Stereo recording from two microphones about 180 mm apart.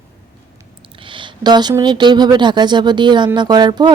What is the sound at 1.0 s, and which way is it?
Speech, 25° right (ahead or behind).